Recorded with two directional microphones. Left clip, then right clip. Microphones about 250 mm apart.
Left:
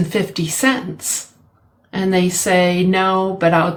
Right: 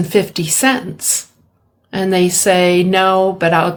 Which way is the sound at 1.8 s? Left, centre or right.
Right.